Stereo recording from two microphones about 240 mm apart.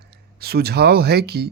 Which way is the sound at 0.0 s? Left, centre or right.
Right.